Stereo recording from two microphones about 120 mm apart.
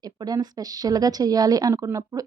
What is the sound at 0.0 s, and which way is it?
A woman's voice, 35° right (ahead or behind).